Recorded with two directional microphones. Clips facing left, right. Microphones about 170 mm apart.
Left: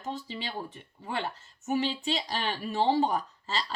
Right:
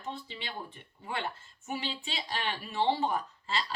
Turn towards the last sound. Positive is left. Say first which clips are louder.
# left 1 dB
turn(degrees=40)  # may be behind; listen again after turning